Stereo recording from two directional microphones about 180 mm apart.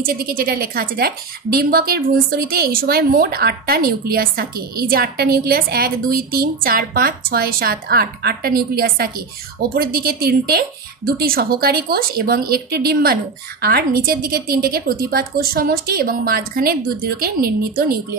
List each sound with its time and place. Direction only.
0.0 s speech: 55° right (ahead or behind)